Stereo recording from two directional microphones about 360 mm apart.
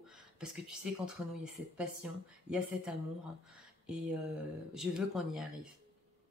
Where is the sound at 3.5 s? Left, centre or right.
Centre.